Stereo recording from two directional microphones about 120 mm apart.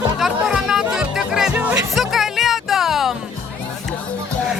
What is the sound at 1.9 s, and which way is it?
Music, centre (ahead or behind).